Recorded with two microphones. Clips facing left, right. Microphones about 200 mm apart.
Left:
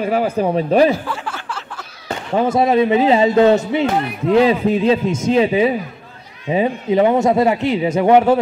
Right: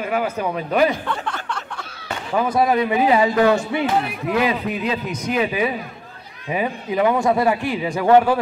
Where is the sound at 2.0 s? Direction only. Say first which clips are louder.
Left 4 dB; 25° left (ahead or behind).